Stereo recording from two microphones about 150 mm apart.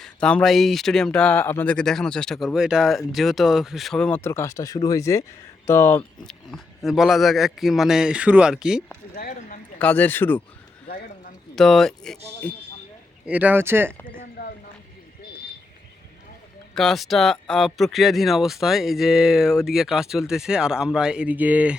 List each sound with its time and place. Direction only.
0.0 s speech: 5° left (ahead or behind)
6.2 s speech: centre (ahead or behind)
9.1 s speech: 85° left
9.7 s speech: 10° left (ahead or behind)
11.5 s speech: centre (ahead or behind)
13.2 s speech: 10° right (ahead or behind)
16.7 s speech: centre (ahead or behind)